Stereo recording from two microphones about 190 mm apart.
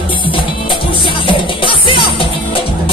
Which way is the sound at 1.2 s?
25° left (ahead or behind).